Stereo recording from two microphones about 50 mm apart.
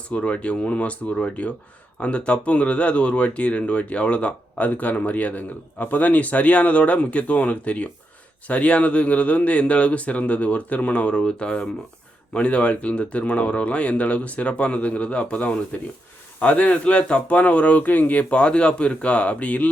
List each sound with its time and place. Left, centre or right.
0.1 s speech: left